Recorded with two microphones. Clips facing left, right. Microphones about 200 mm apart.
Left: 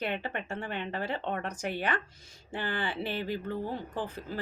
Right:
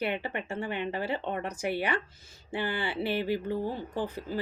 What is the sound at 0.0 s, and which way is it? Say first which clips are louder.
A woman's voice: right 2 dB; 10° right (ahead or behind).